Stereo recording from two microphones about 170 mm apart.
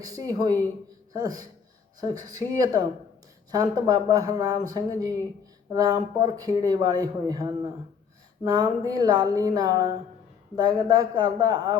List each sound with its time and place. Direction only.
0.0 s speech: 20° right (ahead or behind)